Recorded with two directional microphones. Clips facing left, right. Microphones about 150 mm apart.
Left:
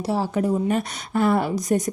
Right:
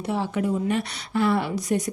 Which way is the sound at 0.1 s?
40° left (ahead or behind).